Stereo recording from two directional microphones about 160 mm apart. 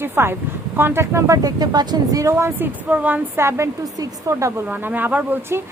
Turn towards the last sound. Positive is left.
turn(degrees=-10)  # may be behind; listen again after turning